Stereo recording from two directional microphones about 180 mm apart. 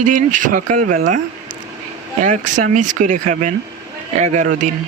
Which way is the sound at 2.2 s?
45° right (ahead or behind).